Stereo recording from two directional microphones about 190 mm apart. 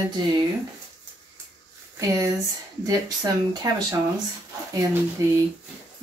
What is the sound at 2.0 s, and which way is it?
Speech, 15° right (ahead or behind).